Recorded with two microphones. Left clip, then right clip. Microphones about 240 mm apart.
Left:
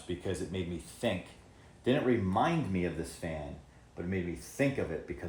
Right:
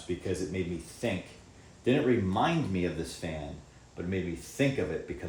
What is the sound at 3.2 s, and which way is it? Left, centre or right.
Speech, centre.